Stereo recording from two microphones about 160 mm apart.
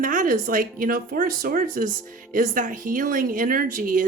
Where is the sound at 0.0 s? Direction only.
55° right (ahead or behind).